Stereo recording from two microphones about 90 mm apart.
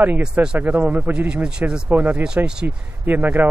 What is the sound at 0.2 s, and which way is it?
Speech, 10° right (ahead or behind).